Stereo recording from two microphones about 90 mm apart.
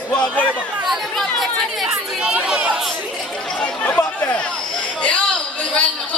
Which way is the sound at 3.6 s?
15° left (ahead or behind).